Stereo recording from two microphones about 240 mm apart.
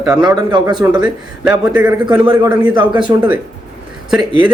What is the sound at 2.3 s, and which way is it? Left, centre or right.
Speech, centre.